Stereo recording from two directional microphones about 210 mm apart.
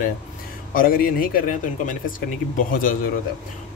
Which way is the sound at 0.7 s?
40° left (ahead or behind).